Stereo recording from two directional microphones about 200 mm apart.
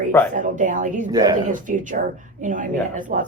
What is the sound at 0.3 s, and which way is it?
A woman's voice, 40° right (ahead or behind).